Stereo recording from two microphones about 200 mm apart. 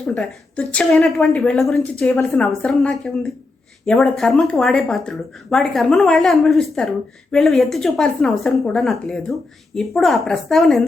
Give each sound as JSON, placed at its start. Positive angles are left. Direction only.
{"t": 0.1, "sound": "speech", "side_deg": 5}